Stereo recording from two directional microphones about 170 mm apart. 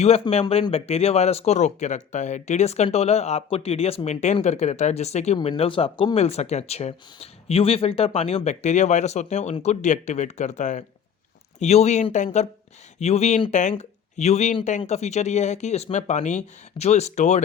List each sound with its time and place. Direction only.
0.0 s speech: 40° left (ahead or behind)